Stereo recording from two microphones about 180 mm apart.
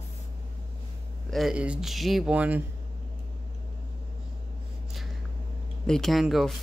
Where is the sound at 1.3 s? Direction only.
5° right (ahead or behind).